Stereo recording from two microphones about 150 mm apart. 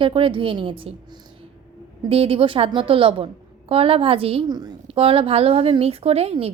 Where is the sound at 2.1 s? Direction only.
40° right (ahead or behind).